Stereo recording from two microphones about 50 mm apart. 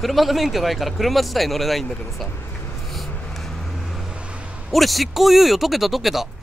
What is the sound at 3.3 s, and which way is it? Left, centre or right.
Vehicle, centre.